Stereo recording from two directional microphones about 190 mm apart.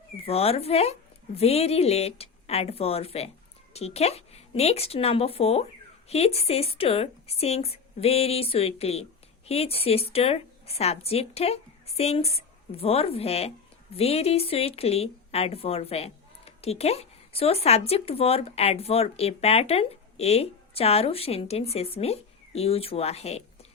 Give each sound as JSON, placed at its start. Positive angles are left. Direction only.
{"t": 0.3, "sound": "a woman's voice", "side_deg": 30}